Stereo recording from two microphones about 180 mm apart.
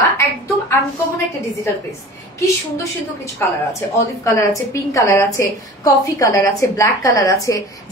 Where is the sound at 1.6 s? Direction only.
15° left (ahead or behind).